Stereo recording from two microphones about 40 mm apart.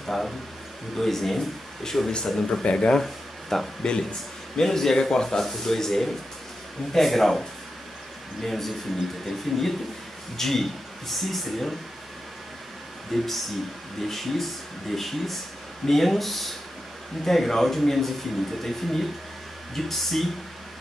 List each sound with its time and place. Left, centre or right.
0.0 s speech: centre; by 3.0 s left
3.0 s speech: centre
13.1 s speech: centre